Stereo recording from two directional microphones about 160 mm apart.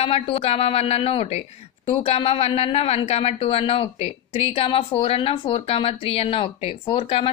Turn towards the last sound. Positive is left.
turn(degrees=35)  # may be behind; listen again after turning